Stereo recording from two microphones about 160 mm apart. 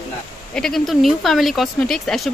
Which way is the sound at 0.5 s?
Centre (ahead or behind).